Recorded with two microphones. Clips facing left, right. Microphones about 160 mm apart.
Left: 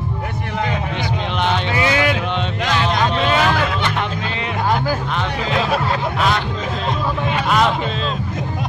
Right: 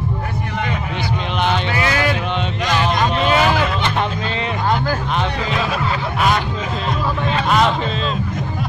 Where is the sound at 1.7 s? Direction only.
20° left (ahead or behind).